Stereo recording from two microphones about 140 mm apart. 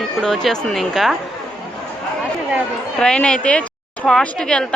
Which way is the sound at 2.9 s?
5° left (ahead or behind).